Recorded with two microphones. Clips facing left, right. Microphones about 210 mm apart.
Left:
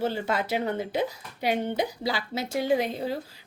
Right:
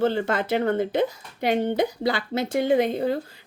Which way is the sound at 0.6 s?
55° right (ahead or behind).